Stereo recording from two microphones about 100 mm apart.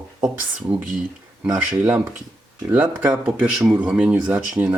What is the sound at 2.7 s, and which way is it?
Speech, 15° right (ahead or behind).